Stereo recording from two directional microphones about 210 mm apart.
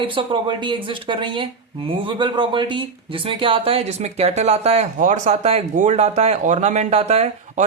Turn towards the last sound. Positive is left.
turn(degrees=-35)  # may be behind; listen again after turning